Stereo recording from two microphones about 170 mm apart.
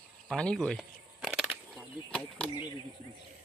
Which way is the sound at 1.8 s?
5° left (ahead or behind).